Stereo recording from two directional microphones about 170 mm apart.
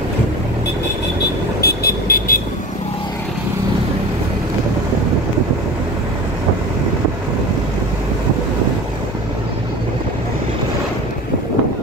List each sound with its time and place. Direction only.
1.6 s vehicle: 70° left (ahead or behind)